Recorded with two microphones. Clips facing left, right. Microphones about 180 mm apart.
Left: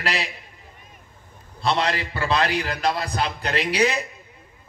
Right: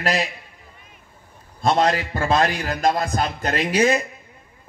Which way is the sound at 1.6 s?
45° right (ahead or behind).